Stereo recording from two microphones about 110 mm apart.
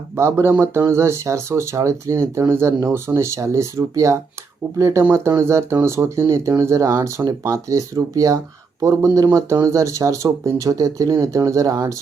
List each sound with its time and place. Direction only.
0.2 s speech: 25° right (ahead or behind)